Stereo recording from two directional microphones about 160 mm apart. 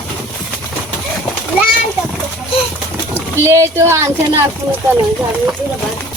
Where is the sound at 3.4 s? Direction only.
20° right (ahead or behind).